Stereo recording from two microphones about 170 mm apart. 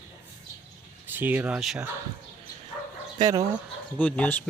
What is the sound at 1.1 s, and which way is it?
Speech, 10° right (ahead or behind).